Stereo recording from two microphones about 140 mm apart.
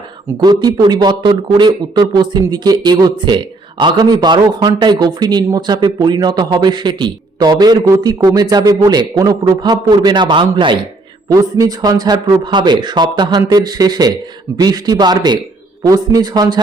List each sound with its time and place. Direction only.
0.3 s a man's voice: 30° right (ahead or behind)
11.3 s a man's voice: 25° right (ahead or behind)